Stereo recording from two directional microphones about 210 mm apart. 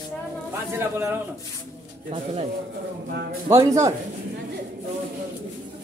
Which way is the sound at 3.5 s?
15° right (ahead or behind).